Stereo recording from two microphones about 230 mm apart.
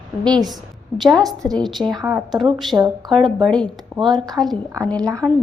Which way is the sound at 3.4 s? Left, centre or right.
Centre.